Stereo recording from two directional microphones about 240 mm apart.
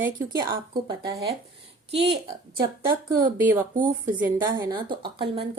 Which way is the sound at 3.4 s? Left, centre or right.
Centre.